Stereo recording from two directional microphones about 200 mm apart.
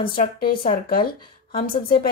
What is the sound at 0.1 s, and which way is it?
A woman's voice, 45° left (ahead or behind).